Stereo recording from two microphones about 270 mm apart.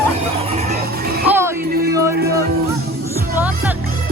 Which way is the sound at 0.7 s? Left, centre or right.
Right.